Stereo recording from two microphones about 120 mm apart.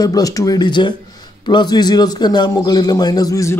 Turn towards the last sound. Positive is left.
turn(degrees=25)  # may be behind; listen again after turning